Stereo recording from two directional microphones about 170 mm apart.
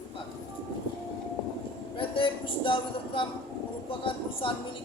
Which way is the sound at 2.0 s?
30° left (ahead or behind).